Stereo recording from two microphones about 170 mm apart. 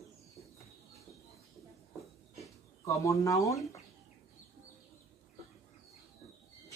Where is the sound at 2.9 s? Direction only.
20° left (ahead or behind).